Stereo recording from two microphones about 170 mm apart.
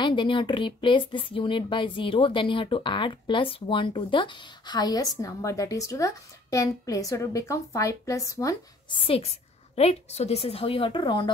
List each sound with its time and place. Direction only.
0.0 s speech: 30° left (ahead or behind)
9.0 s a woman's voice: 35° left (ahead or behind)